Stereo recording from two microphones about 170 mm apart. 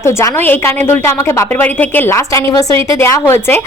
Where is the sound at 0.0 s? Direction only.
15° left (ahead or behind).